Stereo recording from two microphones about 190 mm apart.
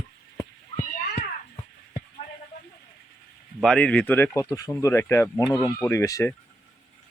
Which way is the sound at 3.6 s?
5° left (ahead or behind).